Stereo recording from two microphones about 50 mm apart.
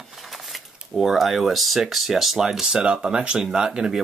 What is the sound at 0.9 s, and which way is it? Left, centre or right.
Speech, centre.